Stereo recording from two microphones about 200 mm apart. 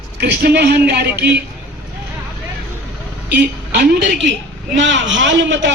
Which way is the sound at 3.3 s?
60° right (ahead or behind).